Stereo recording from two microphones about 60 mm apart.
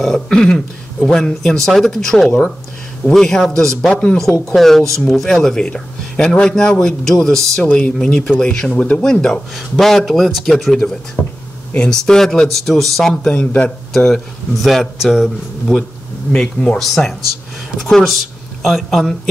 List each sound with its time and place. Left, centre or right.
0.0 s speech: centre
3.9 s speech: centre
4.6 s speech: centre
8.7 s speech: left
9.0 s speech: centre
13.2 s speech: left
13.9 s speech: centre
16.7 s speech: centre